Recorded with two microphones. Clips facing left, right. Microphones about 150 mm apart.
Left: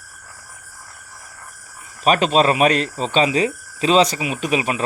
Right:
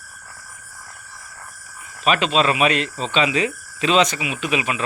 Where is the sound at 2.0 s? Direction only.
40° left (ahead or behind).